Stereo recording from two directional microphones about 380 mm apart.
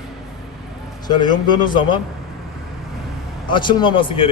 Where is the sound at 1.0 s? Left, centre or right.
Centre.